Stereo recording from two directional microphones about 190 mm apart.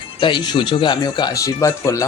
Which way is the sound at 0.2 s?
25° left (ahead or behind).